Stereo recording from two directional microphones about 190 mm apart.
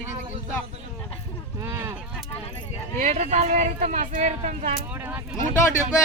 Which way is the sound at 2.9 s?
40° right (ahead or behind).